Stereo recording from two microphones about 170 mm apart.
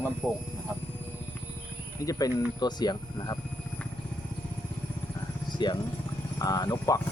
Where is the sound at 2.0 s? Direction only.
20° left (ahead or behind).